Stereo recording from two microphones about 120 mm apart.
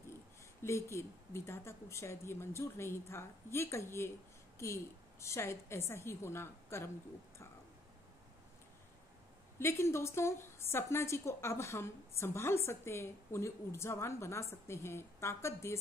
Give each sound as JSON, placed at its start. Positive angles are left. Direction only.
{"t": 0.6, "sound": "a woman's voice", "side_deg": 20}
{"t": 9.6, "sound": "a woman's voice", "side_deg": 20}